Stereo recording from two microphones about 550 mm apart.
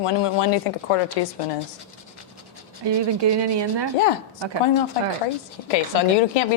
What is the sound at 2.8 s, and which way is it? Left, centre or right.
Speech, right.